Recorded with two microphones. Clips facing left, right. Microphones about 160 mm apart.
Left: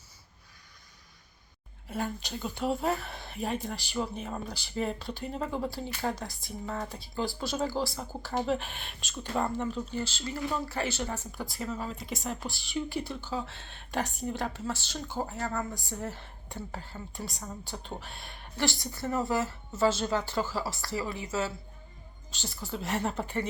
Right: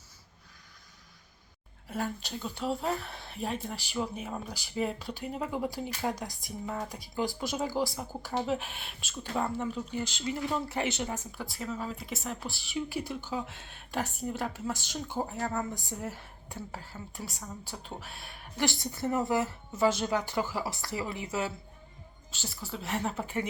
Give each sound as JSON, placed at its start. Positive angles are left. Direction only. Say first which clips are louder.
{"t": 1.9, "sound": "speech", "louder": "even", "side_deg": 0}
{"t": 11.3, "sound": "speech", "louder": "left 1 dB", "side_deg": 0}
{"t": 18.6, "sound": "a woman's voice", "louder": "right 1 dB", "side_deg": -20}
{"t": 22.3, "sound": "speech", "louder": "left 2 dB", "side_deg": -5}